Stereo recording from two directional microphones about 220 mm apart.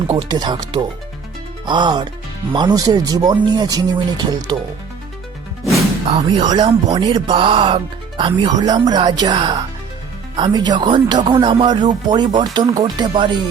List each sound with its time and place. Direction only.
0.1 s speech: 20° right (ahead or behind)
6.1 s speech: 20° right (ahead or behind)